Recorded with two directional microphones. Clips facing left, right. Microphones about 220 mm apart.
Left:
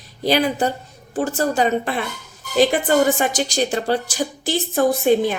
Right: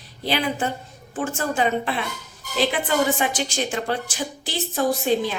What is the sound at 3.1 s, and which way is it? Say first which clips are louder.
Speech: left 4 dB; 40° left (ahead or behind).